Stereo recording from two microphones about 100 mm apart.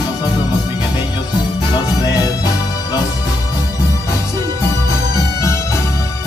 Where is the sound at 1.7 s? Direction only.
40° left (ahead or behind).